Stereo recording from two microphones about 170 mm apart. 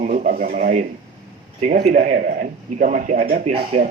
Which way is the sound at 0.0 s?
50° right (ahead or behind).